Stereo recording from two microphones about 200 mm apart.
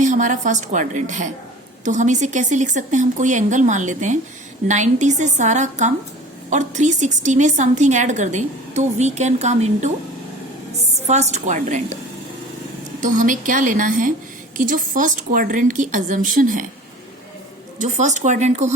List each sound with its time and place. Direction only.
0.0 s a woman's voice: 40° right (ahead or behind)
11.0 s a woman's voice: 35° right (ahead or behind)
13.0 s a woman's voice: 40° right (ahead or behind)
17.7 s a woman's voice: 35° right (ahead or behind)